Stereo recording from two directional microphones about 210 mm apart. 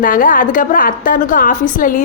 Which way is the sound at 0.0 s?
40° left (ahead or behind).